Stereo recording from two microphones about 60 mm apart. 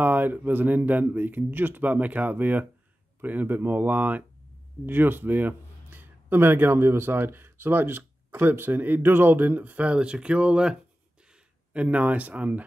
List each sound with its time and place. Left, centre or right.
0.0 s a man's voice: right